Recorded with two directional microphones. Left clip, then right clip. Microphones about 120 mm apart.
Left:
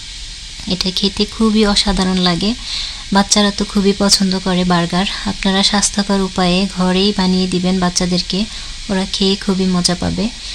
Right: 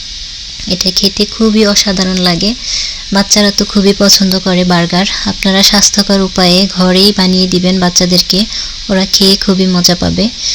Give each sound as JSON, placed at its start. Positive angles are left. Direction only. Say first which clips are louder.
{"t": 0.7, "sound": "speech", "louder": "right 6 dB", "side_deg": -10}